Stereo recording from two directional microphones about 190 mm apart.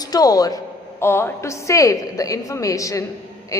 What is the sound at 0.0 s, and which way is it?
A woman's voice, 20° left (ahead or behind).